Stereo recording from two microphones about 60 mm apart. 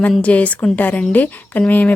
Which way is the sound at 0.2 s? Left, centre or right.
Left.